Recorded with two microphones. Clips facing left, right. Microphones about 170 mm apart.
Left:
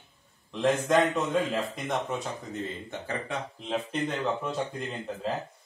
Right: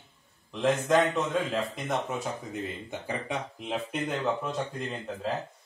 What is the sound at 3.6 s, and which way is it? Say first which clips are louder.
A man's voice: left 2 dB; 5° right (ahead or behind).